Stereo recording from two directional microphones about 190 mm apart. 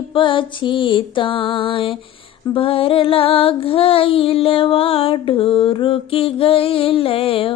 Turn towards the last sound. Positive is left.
turn(degrees=30)  # may be behind; listen again after turning